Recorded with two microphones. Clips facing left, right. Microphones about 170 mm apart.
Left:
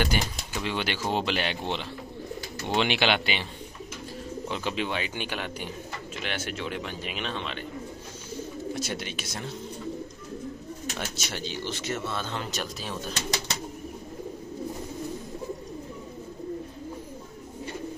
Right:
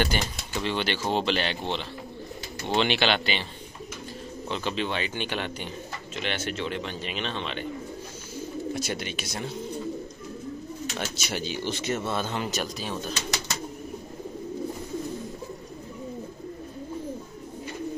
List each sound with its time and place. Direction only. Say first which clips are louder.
0.0 s speech: right 1 dB; 5° left (ahead or behind)
4.5 s speech: right 2 dB; 10° left (ahead or behind)
8.7 s speech: right 2 dB; centre (ahead or behind)
11.2 s speech: right 4 dB; 10° right (ahead or behind)
12.4 s speech: right 3 dB; centre (ahead or behind)